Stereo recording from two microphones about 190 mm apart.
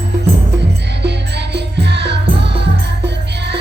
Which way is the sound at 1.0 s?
65° right (ahead or behind).